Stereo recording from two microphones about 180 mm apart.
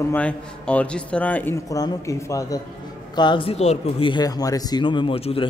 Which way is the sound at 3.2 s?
25° left (ahead or behind).